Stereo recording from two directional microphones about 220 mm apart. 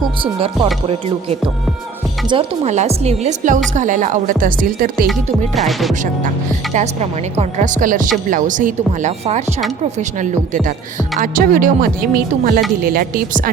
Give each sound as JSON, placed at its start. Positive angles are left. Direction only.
{"t": 0.0, "sound": "a woman's voice", "side_deg": -25}
{"t": 5.5, "sound": "music", "side_deg": 0}
{"t": 6.7, "sound": "speech", "side_deg": -30}